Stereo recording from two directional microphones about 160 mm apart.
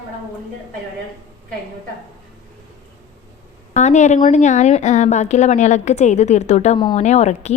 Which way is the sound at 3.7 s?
45° left (ahead or behind).